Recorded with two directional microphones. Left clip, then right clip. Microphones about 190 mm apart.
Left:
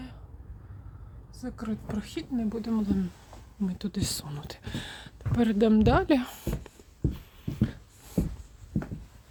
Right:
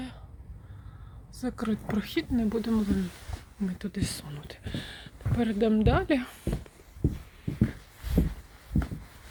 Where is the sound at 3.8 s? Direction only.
45° left (ahead or behind).